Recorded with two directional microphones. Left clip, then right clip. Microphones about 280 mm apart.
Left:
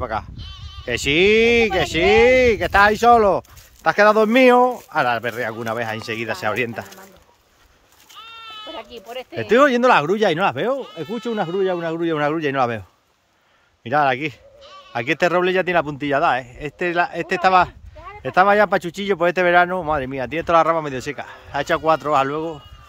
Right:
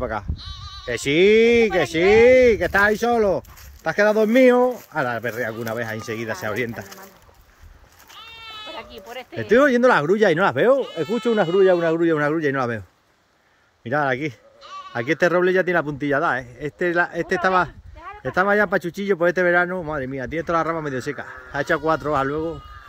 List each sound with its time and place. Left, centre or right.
0.0 s speech: centre
8.2 s goat: right
8.7 s sheep: left
9.4 s speech: centre
13.8 s speech: centre